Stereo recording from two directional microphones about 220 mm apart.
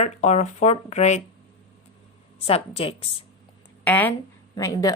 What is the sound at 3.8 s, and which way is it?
Speech, 5° left (ahead or behind).